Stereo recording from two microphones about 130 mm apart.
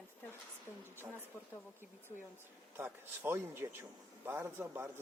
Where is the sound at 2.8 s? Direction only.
15° right (ahead or behind).